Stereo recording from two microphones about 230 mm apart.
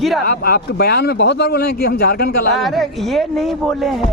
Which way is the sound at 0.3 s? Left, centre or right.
Left.